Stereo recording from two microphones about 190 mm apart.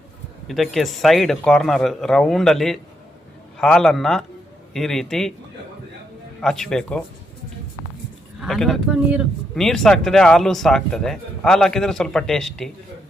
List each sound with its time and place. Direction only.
0.4 s speech: centre (ahead or behind)
6.4 s speech: centre (ahead or behind)
8.4 s speech: centre (ahead or behind)